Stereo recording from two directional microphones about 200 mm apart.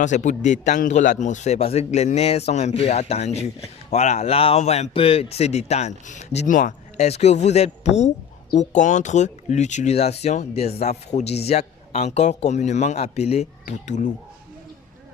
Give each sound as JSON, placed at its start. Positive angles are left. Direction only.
{"t": 0.0, "sound": "speech", "side_deg": 40}